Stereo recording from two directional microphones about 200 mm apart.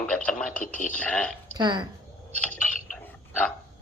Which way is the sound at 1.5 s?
20° right (ahead or behind).